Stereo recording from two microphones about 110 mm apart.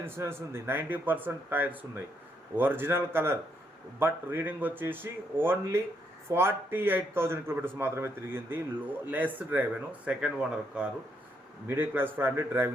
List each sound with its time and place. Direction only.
0.0 s a man's voice: 20° right (ahead or behind)
11.7 s a man's voice: 20° right (ahead or behind)